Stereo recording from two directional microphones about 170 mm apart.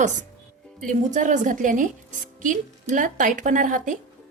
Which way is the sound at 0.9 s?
50° right (ahead or behind).